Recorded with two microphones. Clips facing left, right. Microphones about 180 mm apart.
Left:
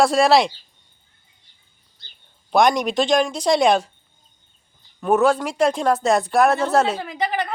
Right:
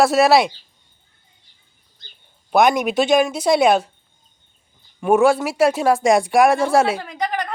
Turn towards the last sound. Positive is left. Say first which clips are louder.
# even
turn(degrees=5)  # may be behind; listen again after turning